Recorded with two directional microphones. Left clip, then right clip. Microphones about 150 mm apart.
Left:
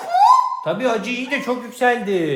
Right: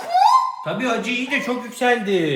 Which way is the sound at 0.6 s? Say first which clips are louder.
Left 3 dB; 50° left (ahead or behind).